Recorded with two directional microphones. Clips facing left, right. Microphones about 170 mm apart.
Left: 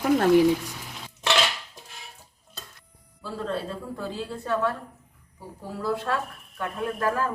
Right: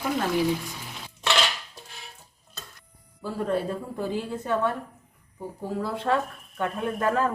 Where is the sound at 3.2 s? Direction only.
15° right (ahead or behind).